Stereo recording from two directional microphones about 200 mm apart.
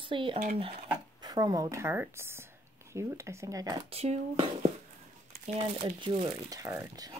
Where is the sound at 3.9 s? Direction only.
30° right (ahead or behind).